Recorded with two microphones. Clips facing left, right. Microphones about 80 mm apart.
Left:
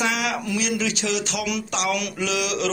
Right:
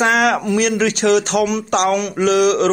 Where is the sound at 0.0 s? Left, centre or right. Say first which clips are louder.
Right 9 dB; right.